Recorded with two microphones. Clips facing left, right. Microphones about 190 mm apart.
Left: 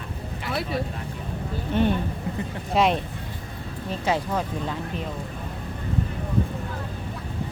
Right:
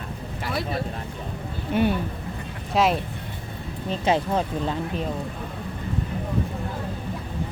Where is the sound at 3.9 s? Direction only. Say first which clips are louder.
Right 3 dB; 25° right (ahead or behind).